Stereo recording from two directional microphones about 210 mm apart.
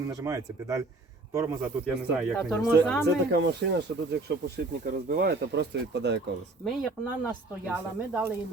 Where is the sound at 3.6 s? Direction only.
55° right (ahead or behind).